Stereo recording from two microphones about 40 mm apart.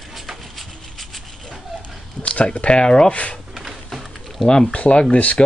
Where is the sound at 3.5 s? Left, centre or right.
Centre.